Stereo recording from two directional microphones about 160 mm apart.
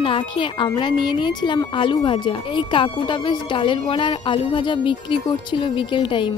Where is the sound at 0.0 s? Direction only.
30° left (ahead or behind).